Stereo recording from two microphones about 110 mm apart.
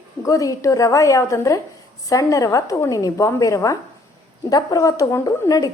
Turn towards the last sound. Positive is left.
turn(degrees=35)  # may be behind; listen again after turning